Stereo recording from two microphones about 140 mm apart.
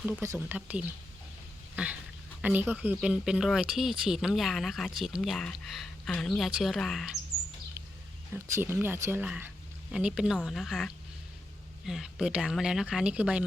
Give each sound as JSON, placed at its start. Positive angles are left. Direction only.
{"t": 0.0, "sound": "speech", "side_deg": -15}
{"t": 1.7, "sound": "dog", "side_deg": -10}
{"t": 2.4, "sound": "speech", "side_deg": -10}
{"t": 8.3, "sound": "speech", "side_deg": -15}